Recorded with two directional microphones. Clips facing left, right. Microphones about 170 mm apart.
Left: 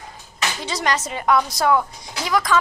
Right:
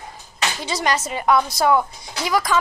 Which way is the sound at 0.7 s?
10° right (ahead or behind).